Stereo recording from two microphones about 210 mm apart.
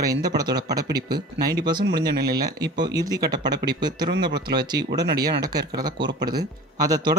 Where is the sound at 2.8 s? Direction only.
20° right (ahead or behind).